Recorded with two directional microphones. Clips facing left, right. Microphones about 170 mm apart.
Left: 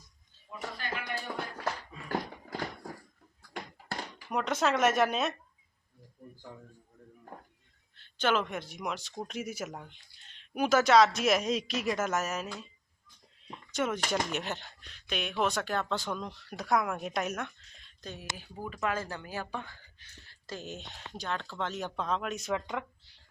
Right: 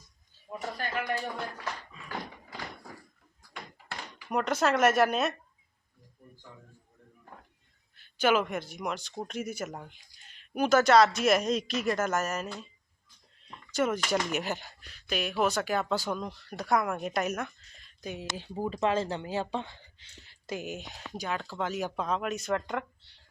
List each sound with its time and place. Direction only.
0.5 s a sound: 40° right (ahead or behind)
1.5 s a sound: 55° left (ahead or behind)
4.3 s speech: centre (ahead or behind)
7.9 s speech: 10° right (ahead or behind)
13.7 s speech: centre (ahead or behind)
18.0 s speech: 15° right (ahead or behind)
18.3 s speech: 30° right (ahead or behind); by 22.9 s centre (ahead or behind)